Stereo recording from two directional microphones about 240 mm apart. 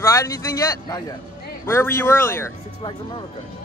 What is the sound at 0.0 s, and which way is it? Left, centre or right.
Speech, centre.